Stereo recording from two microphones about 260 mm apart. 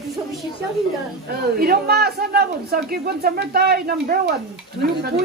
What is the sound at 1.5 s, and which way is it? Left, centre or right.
Speech, right.